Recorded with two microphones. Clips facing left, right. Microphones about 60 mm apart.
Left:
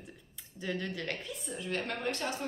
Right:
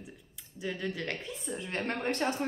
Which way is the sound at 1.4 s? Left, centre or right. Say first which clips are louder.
Right 2 dB; right.